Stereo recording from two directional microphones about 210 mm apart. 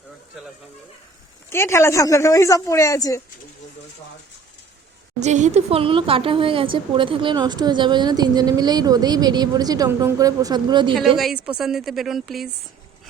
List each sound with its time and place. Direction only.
1.5 s speech: 10° left (ahead or behind)
5.2 s speech: 35° right (ahead or behind)
11.2 s speech: 5° right (ahead or behind)